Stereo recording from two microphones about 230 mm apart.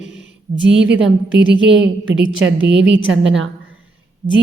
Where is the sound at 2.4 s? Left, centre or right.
Right.